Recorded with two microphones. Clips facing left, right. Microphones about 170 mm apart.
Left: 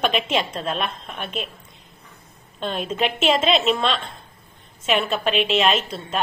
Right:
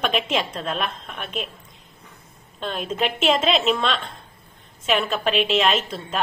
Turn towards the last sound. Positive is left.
turn(degrees=0)  # may be behind; listen again after turning